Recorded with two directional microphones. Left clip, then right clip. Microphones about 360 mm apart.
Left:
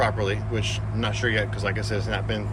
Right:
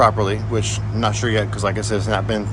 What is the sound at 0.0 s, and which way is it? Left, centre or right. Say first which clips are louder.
Speech: right 8 dB; centre.